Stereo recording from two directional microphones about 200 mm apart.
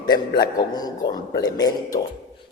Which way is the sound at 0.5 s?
20° left (ahead or behind).